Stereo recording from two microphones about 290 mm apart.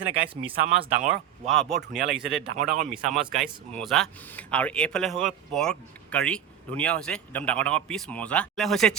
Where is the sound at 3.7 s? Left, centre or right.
Centre.